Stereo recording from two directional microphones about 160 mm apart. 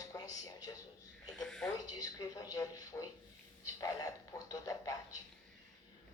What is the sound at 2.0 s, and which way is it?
A man's voice, 20° left (ahead or behind).